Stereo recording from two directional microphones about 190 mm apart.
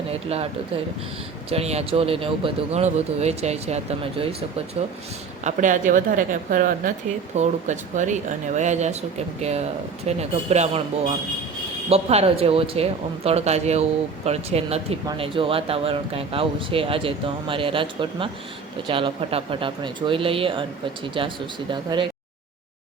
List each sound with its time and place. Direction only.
0.1 s speech: 30° right (ahead or behind)
1.5 s a woman's voice: 35° right (ahead or behind)